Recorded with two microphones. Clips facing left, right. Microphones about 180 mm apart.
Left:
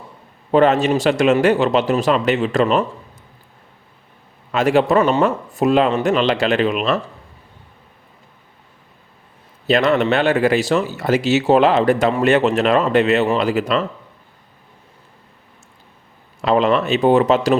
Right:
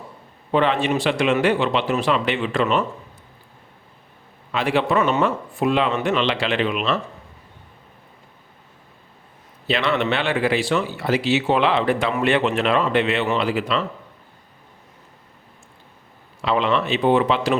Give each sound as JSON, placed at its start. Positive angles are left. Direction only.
{"t": 0.5, "sound": "speech", "side_deg": 45}
{"t": 4.5, "sound": "speech", "side_deg": 45}
{"t": 9.6, "sound": "speech", "side_deg": 45}
{"t": 16.4, "sound": "speech", "side_deg": 45}